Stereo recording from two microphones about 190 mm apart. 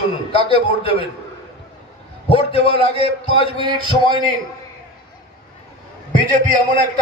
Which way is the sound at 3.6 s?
25° right (ahead or behind).